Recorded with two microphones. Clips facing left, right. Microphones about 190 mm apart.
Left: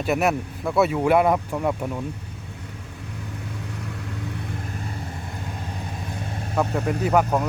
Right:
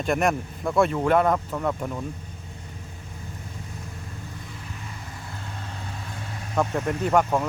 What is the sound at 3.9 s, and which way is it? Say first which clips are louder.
Vehicle: left 7 dB; 75° left (ahead or behind).